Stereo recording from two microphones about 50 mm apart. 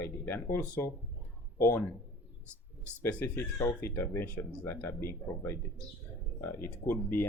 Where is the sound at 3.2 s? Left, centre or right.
Left.